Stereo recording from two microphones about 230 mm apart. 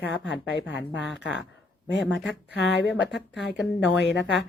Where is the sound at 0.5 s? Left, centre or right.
Left.